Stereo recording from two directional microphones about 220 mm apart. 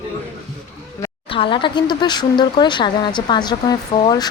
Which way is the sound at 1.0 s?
25° left (ahead or behind).